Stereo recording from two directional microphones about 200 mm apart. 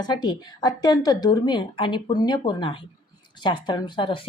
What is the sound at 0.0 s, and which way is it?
Speech, 20° left (ahead or behind).